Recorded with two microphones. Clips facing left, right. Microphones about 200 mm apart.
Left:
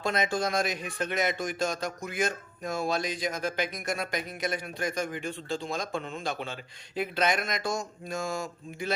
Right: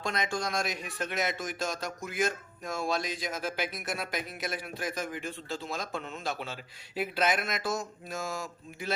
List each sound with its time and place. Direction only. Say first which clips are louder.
0.0 s speech: left 4 dB; 5° left (ahead or behind)